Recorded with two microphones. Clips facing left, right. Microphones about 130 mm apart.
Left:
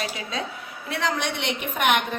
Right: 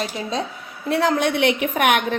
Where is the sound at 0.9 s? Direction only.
55° right (ahead or behind).